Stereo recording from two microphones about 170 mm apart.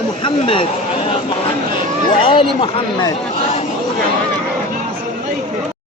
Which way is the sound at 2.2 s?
30° left (ahead or behind).